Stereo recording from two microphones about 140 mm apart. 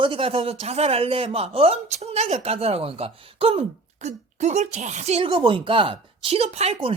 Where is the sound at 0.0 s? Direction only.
40° right (ahead or behind).